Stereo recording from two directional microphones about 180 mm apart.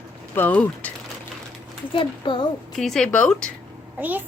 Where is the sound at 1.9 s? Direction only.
25° left (ahead or behind).